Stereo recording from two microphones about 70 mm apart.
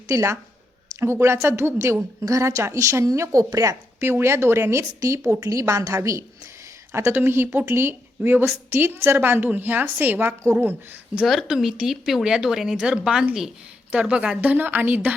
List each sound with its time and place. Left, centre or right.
0.1 s a woman's voice: right
2.2 s a woman's voice: right
11.4 s a woman's voice: centre
14.5 s speech: right